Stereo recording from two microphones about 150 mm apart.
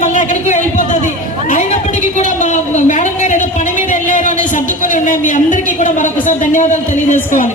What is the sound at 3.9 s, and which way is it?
A woman's voice, 55° left (ahead or behind).